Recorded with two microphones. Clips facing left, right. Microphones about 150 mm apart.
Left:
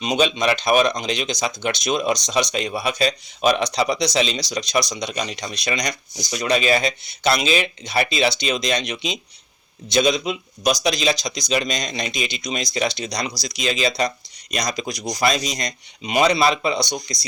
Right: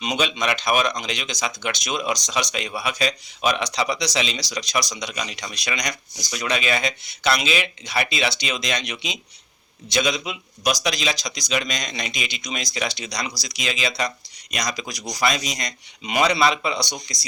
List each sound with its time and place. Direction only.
0.0 s speech: 30° left (ahead or behind)